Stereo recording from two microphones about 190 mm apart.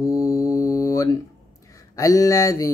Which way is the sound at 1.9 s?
20° left (ahead or behind).